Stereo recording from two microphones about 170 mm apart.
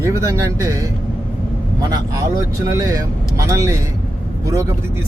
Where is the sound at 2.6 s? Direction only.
20° right (ahead or behind).